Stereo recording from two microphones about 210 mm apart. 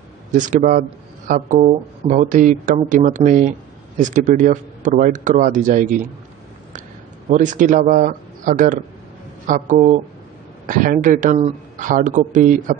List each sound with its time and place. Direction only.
0.3 s speech: 35° right (ahead or behind)
7.2 s speech: 35° right (ahead or behind)